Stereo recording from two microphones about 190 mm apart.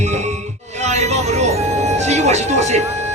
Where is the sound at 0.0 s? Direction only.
35° right (ahead or behind).